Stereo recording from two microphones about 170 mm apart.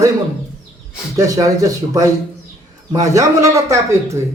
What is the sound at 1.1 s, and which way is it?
Speech, 20° right (ahead or behind).